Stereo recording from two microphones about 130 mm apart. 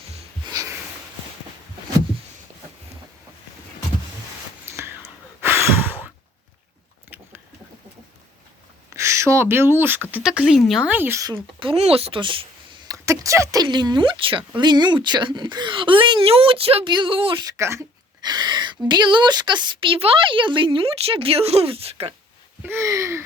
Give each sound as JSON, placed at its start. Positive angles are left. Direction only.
{"t": 0.4, "sound": "wheeze", "side_deg": -25}
{"t": 4.6, "sound": "sigh", "side_deg": -15}
{"t": 8.9, "sound": "speech", "side_deg": -20}
{"t": 10.8, "sound": "speech", "side_deg": -15}
{"t": 11.6, "sound": "speech", "side_deg": -50}
{"t": 12.9, "sound": "speech", "side_deg": -25}
{"t": 13.7, "sound": "a woman's voice", "side_deg": -35}
{"t": 17.6, "sound": "a sound", "side_deg": -20}
{"t": 18.2, "sound": "a woman's voice", "side_deg": -35}
{"t": 22.6, "sound": "a sound", "side_deg": -20}